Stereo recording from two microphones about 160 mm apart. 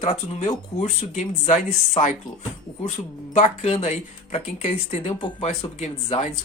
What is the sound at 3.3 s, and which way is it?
Speech, 45° left (ahead or behind).